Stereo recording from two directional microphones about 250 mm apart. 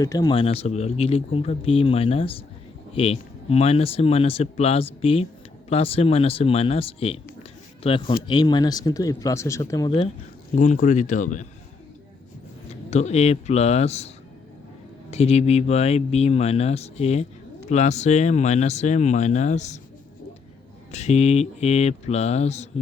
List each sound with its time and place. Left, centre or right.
0.0 s a man's voice: centre
10.6 s speech: left
12.9 s speech: left
15.1 s speech: left
20.9 s speech: left